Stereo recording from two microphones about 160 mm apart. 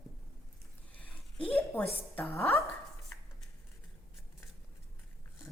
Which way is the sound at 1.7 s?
10° left (ahead or behind).